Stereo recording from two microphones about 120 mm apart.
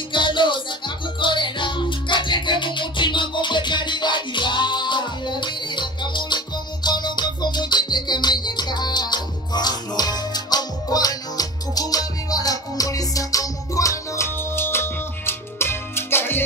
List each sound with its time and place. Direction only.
0.1 s music: 40° left (ahead or behind); by 16.4 s 20° left (ahead or behind)